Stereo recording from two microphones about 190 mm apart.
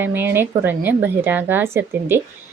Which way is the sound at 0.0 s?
10° right (ahead or behind).